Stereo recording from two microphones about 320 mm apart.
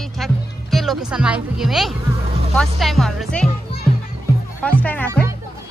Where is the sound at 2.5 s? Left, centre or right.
Centre.